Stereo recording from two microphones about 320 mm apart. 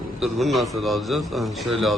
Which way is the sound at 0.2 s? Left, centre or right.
Centre.